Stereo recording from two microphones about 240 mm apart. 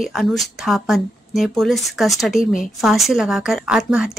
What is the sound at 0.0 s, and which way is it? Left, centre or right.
Speech, centre.